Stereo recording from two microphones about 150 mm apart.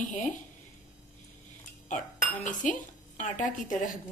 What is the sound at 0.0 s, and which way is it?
Speech, 55° left (ahead or behind).